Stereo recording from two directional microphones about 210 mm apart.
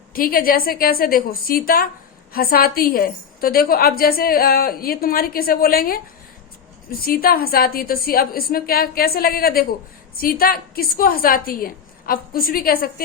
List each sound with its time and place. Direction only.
0.1 s a woman's voice: 45° left (ahead or behind)
7.0 s a woman's voice: 45° left (ahead or behind)